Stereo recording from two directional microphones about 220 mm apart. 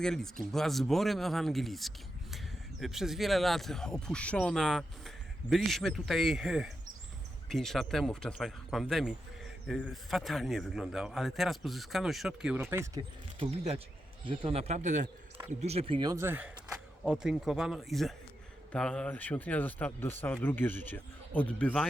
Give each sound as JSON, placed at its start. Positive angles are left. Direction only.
{"t": 0.0, "sound": "speech", "side_deg": 0}